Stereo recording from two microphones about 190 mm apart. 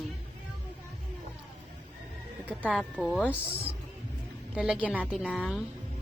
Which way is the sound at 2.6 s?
Centre (ahead or behind).